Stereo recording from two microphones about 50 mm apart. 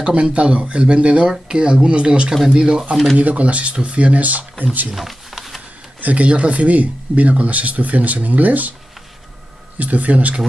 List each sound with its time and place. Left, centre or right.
0.0 s speech: right
3.2 s speech: right
4.9 s a sound: centre
5.9 s speech: right
9.8 s speech: right